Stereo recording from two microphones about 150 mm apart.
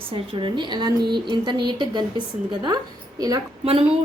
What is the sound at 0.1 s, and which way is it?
A woman's voice, 35° right (ahead or behind).